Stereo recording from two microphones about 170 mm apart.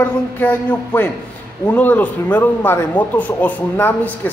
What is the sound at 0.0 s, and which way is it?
Speech, 10° left (ahead or behind).